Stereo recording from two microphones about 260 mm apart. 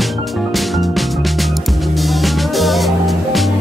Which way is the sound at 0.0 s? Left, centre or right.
Centre.